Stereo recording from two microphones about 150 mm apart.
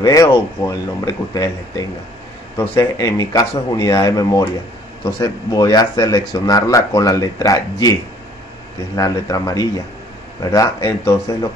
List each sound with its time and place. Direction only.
0.0 s speech: 25° left (ahead or behind)
8.9 s speech: 25° left (ahead or behind)